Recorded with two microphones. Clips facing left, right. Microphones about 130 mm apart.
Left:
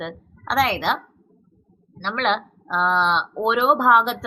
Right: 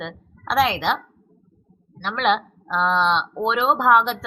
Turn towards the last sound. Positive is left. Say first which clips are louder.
# even
turn(degrees=5)  # may be behind; listen again after turning